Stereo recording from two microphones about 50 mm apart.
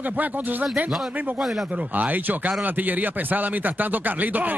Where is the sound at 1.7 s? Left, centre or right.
Right.